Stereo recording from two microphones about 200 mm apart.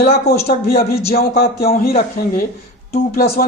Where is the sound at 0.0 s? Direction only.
50° left (ahead or behind).